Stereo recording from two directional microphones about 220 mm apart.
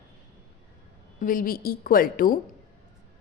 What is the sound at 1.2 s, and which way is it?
A woman's voice, 40° left (ahead or behind).